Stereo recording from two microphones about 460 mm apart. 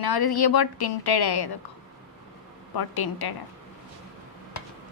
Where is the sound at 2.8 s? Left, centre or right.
Left.